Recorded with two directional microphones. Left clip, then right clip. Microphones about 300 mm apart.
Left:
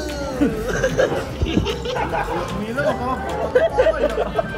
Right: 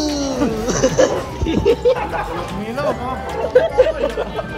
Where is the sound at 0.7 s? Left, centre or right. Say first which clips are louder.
Right 6 dB; centre.